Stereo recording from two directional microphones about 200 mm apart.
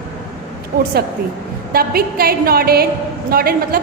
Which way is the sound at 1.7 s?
50° right (ahead or behind).